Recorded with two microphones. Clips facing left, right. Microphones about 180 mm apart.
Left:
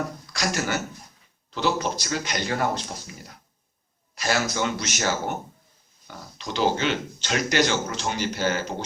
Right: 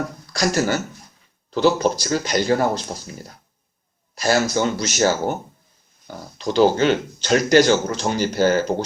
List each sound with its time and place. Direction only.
0.3 s speech: 35° right (ahead or behind)
4.2 s speech: 40° right (ahead or behind)